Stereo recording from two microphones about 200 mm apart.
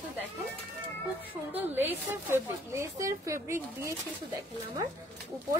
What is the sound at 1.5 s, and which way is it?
Speech, 10° right (ahead or behind).